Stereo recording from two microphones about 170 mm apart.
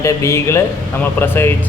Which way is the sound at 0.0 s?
15° left (ahead or behind).